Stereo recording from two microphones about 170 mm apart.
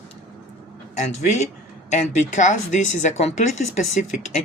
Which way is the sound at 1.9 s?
45° left (ahead or behind).